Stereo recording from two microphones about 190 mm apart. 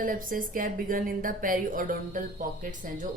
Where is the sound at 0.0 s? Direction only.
45° right (ahead or behind).